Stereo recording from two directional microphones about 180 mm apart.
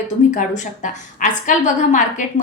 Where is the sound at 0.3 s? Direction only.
45° left (ahead or behind).